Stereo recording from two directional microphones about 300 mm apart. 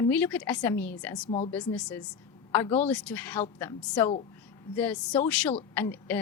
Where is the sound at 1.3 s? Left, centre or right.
Left.